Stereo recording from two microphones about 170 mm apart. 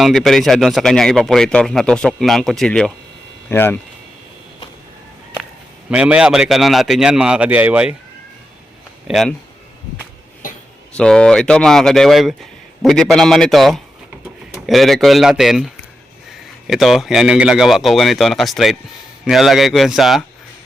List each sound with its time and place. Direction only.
0.0 s speech: centre (ahead or behind)
5.9 s speech: 5° right (ahead or behind)
9.0 s speech: centre (ahead or behind)
10.9 s speech: 5° left (ahead or behind)